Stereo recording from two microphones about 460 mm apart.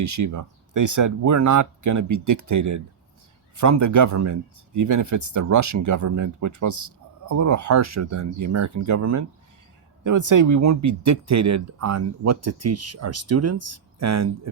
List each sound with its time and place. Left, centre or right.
0.0 s speech: right